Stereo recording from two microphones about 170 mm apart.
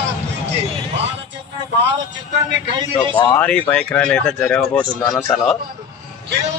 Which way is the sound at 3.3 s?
10° left (ahead or behind).